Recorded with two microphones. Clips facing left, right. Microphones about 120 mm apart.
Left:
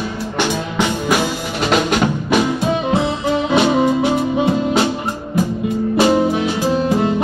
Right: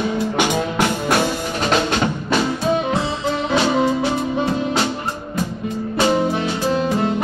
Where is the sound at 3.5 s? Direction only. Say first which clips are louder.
Left 3 dB; 15° left (ahead or behind).